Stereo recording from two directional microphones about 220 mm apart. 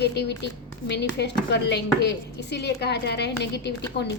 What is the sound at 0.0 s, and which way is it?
A woman's voice, 50° left (ahead or behind).